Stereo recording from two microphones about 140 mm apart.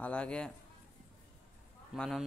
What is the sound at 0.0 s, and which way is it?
Speech, 10° left (ahead or behind).